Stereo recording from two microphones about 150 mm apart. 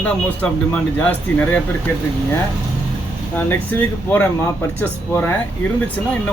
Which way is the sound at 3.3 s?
15° left (ahead or behind).